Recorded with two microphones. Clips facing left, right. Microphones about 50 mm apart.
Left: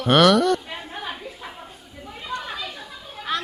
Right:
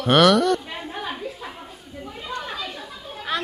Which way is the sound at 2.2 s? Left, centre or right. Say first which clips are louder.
Left 1 dB; centre.